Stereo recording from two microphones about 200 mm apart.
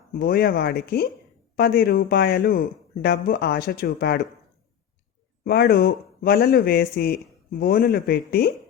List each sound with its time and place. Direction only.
0.1 s speech: 50° left (ahead or behind)
5.5 s speech: 50° left (ahead or behind)